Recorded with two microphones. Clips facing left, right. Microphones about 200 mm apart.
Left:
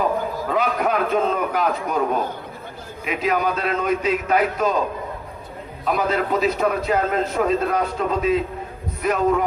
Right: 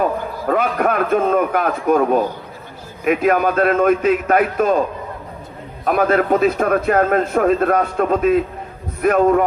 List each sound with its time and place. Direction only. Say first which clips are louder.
0.4 s a man's voice: right 6 dB; 55° right (ahead or behind)
5.8 s a man's voice: right 6 dB; 55° right (ahead or behind)